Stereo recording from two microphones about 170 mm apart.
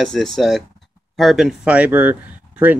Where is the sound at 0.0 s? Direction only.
5° left (ahead or behind).